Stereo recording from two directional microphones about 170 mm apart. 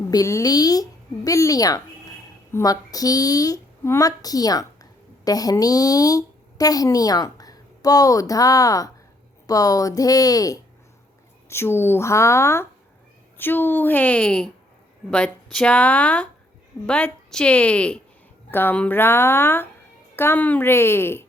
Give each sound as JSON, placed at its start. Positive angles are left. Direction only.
{"t": 0.1, "sound": "a woman's voice", "side_deg": 20}